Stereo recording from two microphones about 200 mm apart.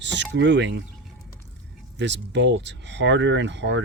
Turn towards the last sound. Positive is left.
turn(degrees=-65)  # may be behind; listen again after turning